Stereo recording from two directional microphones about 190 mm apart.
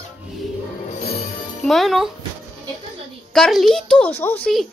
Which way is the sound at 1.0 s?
55° left (ahead or behind).